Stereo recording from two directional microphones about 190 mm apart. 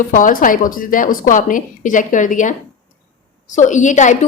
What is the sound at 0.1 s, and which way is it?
A woman's voice, 45° left (ahead or behind).